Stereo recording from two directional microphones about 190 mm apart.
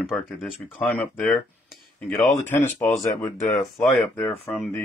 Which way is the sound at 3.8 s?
5° left (ahead or behind).